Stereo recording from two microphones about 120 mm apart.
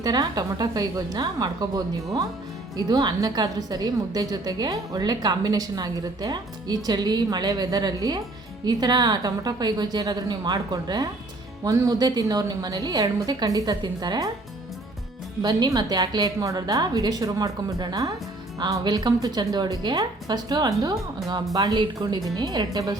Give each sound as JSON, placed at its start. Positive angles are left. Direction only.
{"t": 0.0, "sound": "a woman's voice", "side_deg": -35}
{"t": 15.4, "sound": "a woman's voice", "side_deg": -35}